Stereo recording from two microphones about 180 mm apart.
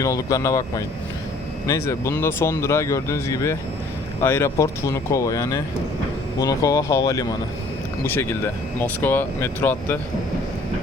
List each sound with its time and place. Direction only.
0.0 s speech: 20° left (ahead or behind)
1.6 s speech: 15° left (ahead or behind)